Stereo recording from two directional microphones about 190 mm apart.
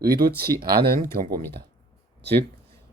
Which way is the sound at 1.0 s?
50° right (ahead or behind).